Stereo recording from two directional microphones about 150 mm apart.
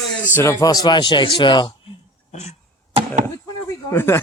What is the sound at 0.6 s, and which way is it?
Speech, 25° left (ahead or behind).